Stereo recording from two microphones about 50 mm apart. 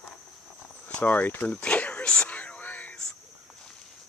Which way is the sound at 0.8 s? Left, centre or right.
Left.